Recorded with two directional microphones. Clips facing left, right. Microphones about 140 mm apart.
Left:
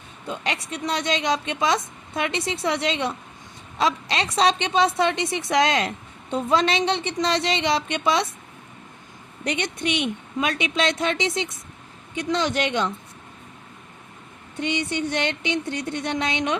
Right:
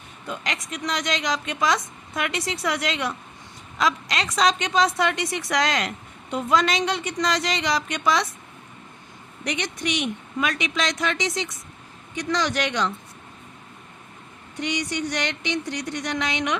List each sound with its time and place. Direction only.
0.3 s speech: 30° left (ahead or behind)
9.4 s speech: 25° left (ahead or behind)
12.4 s speech: 25° left (ahead or behind)
14.7 s speech: 25° left (ahead or behind)